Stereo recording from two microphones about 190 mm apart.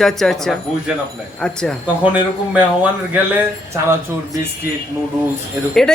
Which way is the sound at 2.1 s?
10° right (ahead or behind).